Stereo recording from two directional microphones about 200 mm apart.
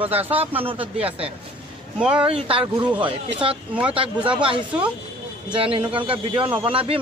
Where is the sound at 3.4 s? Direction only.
25° right (ahead or behind).